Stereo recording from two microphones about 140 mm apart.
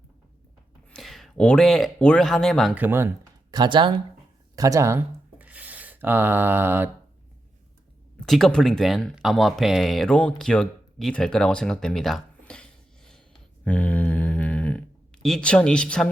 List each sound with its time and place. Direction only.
0.9 s speech: centre (ahead or behind)
2.7 s speech: 15° right (ahead or behind)
3.5 s speech: 30° right (ahead or behind)
4.5 s speech: 25° right (ahead or behind)
8.2 s speech: 5° left (ahead or behind)
13.7 s a sound: 10° left (ahead or behind)